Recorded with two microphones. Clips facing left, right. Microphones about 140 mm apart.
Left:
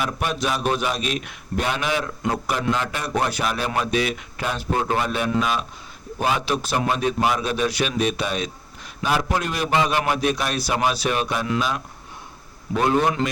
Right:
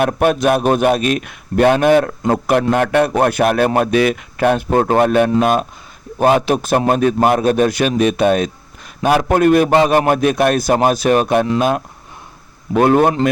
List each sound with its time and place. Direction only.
0.0 s a man's voice: 55° right (ahead or behind)
12.7 s a man's voice: 55° right (ahead or behind)